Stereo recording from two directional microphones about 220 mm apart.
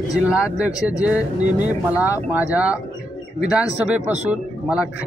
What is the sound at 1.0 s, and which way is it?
Speech, 5° right (ahead or behind).